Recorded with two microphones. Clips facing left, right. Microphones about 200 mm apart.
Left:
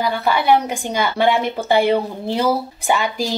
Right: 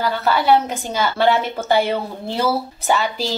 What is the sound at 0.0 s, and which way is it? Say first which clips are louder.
Speech: even; 15° left (ahead or behind).